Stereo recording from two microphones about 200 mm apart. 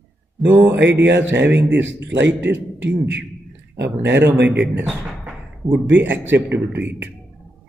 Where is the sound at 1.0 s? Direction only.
65° right (ahead or behind).